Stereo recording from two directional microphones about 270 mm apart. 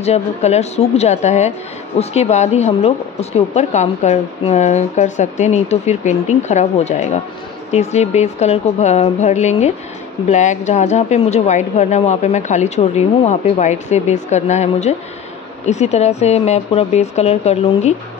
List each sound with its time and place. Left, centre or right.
0.0 s speech: left